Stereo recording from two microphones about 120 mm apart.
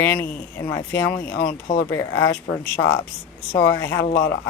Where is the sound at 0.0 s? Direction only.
20° left (ahead or behind).